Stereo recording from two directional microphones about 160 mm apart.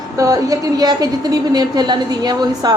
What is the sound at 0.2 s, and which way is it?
A woman's voice, 20° right (ahead or behind).